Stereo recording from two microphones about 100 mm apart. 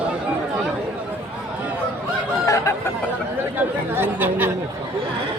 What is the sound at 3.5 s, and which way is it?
Speech, 20° right (ahead or behind).